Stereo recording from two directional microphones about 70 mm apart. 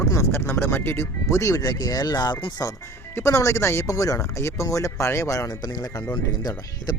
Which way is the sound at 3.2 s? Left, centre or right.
Left.